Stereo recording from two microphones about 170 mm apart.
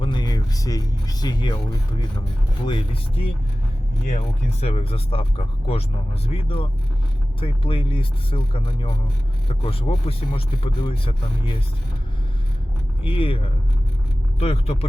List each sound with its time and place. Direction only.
0.0 s speech: 25° left (ahead or behind)
2.6 s speech: 30° left (ahead or behind)
4.6 s speech: 35° left (ahead or behind)
13.0 s speech: 30° left (ahead or behind)